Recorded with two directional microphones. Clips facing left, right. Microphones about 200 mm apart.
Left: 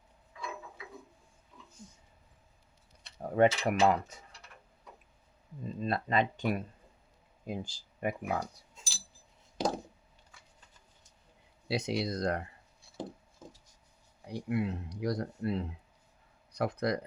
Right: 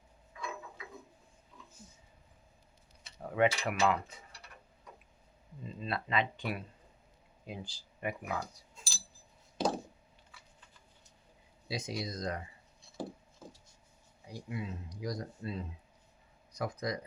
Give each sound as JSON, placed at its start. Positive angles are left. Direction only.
{"t": 3.2, "sound": "mechanisms", "side_deg": 40}
{"t": 5.6, "sound": "mechanisms", "side_deg": 45}
{"t": 7.4, "sound": "speech", "side_deg": 45}
{"t": 8.7, "sound": "a sound", "side_deg": 15}
{"t": 11.7, "sound": "speech", "side_deg": 65}
{"t": 14.3, "sound": "speech", "side_deg": 65}